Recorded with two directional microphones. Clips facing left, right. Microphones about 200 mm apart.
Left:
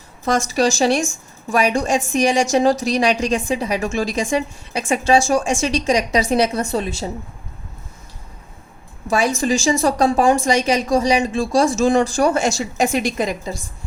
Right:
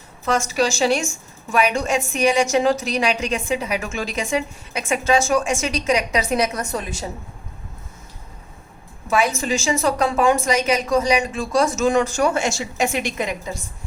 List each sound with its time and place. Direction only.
0.3 s a woman's voice: 35° left (ahead or behind)
9.0 s a woman's voice: 30° left (ahead or behind)